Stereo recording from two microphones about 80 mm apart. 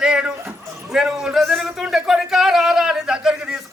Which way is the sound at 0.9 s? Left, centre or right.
Centre.